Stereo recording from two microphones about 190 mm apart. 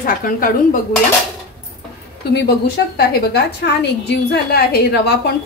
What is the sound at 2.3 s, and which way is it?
A woman's voice, 60° left (ahead or behind).